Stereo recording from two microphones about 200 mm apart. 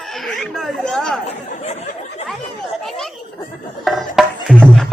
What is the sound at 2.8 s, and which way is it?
Speech, centre (ahead or behind).